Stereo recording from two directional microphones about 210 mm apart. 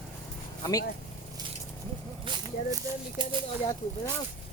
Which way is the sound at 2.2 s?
20° right (ahead or behind).